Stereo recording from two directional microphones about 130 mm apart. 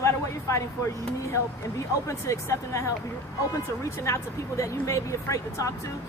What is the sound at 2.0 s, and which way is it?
Speech, 25° left (ahead or behind).